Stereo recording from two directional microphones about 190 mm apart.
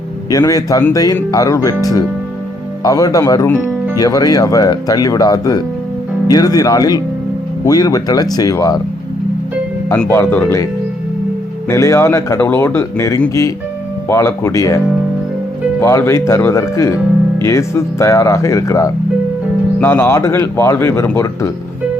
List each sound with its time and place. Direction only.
0.3 s speech: 20° left (ahead or behind)
9.9 s speech: 10° left (ahead or behind)
11.7 s speech: 15° left (ahead or behind)
15.8 s speech: 15° left (ahead or behind)